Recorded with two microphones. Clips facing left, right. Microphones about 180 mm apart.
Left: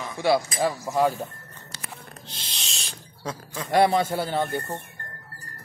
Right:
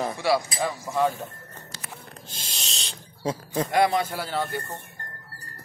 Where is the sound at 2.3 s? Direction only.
45° right (ahead or behind).